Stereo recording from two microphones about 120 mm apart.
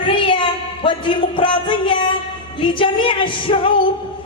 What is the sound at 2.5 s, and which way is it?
Music, 45° left (ahead or behind).